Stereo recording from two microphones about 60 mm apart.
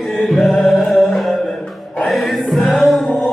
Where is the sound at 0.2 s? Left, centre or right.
Centre.